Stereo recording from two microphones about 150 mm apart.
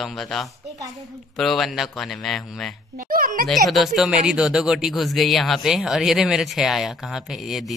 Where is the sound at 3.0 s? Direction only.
70° right (ahead or behind).